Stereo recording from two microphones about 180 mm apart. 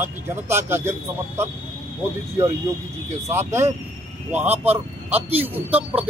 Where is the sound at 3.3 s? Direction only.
15° right (ahead or behind).